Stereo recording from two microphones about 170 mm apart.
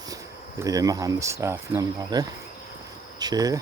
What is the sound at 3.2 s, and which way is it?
Cricket, 25° right (ahead or behind).